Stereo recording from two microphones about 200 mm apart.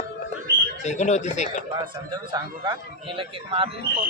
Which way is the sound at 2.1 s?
20° right (ahead or behind).